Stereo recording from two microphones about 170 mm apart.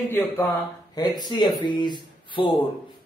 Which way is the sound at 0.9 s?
25° left (ahead or behind).